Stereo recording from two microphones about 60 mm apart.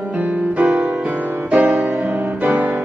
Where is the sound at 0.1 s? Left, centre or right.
Right.